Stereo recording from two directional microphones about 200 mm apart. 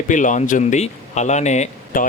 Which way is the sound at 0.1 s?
40° left (ahead or behind).